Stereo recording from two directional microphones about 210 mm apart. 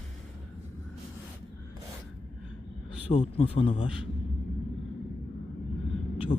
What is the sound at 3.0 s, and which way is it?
Speech, 25° left (ahead or behind).